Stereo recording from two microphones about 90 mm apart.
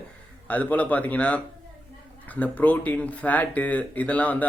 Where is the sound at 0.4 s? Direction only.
20° left (ahead or behind).